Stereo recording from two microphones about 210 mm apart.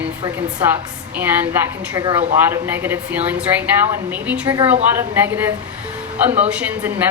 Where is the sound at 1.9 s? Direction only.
25° right (ahead or behind).